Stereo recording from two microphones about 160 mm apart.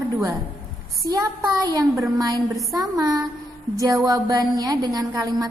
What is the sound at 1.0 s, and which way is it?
A woman's voice, 20° right (ahead or behind).